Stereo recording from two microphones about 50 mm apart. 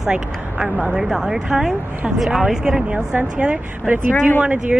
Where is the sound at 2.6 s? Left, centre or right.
Centre.